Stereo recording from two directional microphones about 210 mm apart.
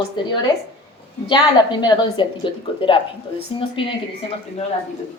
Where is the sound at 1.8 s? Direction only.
20° left (ahead or behind).